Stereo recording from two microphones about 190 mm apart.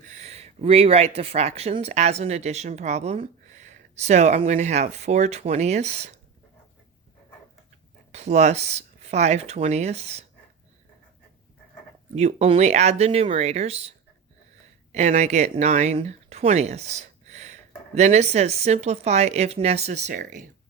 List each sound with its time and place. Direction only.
0.0 s speech: 40° right (ahead or behind)
8.1 s speech: 35° right (ahead or behind)
12.1 s speech: 35° right (ahead or behind)
14.9 s speech: 35° right (ahead or behind)